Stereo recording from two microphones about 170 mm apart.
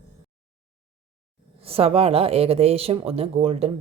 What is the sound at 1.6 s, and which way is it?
Speech, 35° right (ahead or behind).